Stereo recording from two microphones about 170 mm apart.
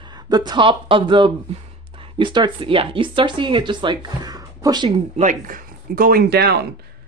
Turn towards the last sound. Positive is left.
turn(degrees=-70)  # may be behind; listen again after turning